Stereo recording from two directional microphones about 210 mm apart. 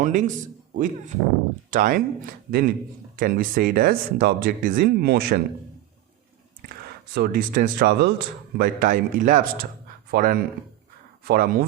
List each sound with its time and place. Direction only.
0.0 s a man's voice: 35° right (ahead or behind)
7.1 s speech: 45° right (ahead or behind)